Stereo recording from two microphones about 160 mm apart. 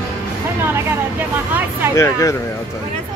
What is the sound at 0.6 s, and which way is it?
Speech, 15° right (ahead or behind).